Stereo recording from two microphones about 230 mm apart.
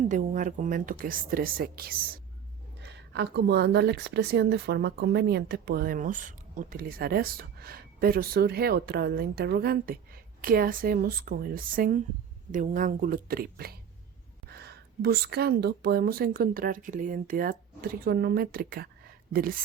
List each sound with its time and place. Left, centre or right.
0.1 s speech: right